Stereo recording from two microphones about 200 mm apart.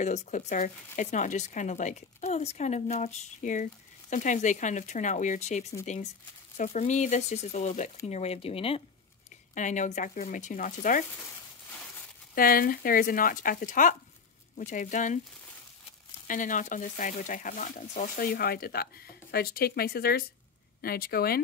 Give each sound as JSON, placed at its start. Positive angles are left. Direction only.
{"t": 0.0, "sound": "speech", "side_deg": 35}
{"t": 12.4, "sound": "speech", "side_deg": 45}
{"t": 16.3, "sound": "speech", "side_deg": 40}